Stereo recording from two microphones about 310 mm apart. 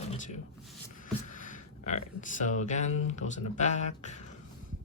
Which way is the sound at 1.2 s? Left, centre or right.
Left.